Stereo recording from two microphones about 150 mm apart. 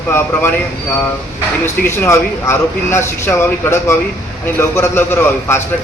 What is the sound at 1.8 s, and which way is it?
A man's voice, 15° left (ahead or behind).